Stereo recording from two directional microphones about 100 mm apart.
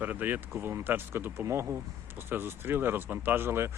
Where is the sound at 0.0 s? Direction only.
15° right (ahead or behind).